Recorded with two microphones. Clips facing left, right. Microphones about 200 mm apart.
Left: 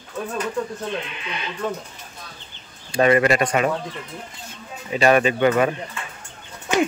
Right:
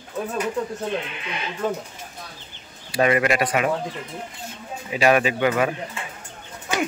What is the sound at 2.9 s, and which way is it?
Speech, 10° right (ahead or behind).